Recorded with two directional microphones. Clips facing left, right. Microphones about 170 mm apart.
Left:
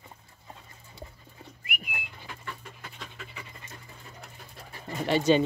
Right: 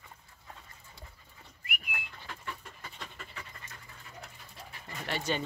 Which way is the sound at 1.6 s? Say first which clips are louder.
Left 2 dB; 15° left (ahead or behind).